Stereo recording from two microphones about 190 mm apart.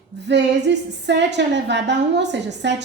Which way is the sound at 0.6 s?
65° right (ahead or behind).